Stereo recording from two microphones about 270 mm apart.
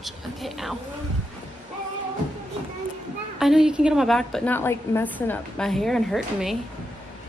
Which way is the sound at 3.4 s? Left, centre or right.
Centre.